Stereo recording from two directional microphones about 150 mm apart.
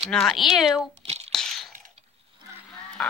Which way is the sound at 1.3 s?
5° left (ahead or behind).